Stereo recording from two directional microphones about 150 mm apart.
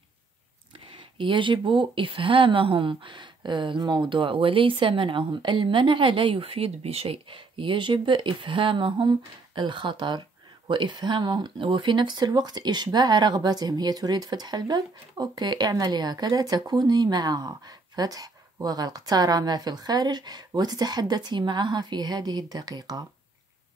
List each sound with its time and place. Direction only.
1.1 s a woman's voice: 35° right (ahead or behind)